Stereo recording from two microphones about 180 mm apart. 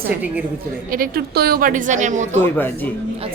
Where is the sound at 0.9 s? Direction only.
55° right (ahead or behind).